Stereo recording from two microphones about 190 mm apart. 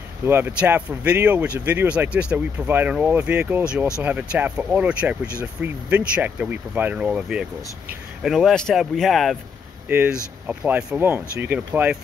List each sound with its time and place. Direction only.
0.3 s speech: 10° right (ahead or behind)